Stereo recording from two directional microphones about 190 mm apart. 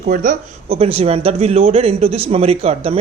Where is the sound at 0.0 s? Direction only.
45° right (ahead or behind).